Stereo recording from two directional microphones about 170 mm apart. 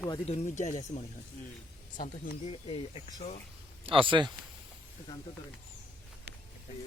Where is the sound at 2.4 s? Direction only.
35° left (ahead or behind).